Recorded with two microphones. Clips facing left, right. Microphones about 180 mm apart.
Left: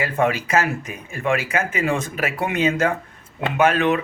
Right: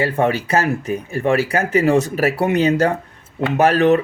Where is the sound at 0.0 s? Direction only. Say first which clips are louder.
Right 3 dB; 35° right (ahead or behind).